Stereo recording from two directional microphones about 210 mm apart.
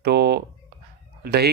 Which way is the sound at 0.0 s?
50° right (ahead or behind).